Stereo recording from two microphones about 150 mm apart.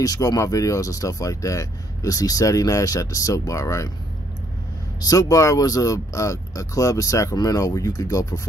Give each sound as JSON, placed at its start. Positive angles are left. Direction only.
{"t": 0.0, "sound": "speech", "side_deg": 25}
{"t": 5.0, "sound": "speech", "side_deg": 20}